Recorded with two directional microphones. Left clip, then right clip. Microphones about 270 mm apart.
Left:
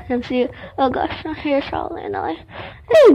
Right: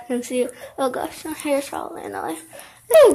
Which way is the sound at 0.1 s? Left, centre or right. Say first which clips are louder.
Left 3 dB; centre.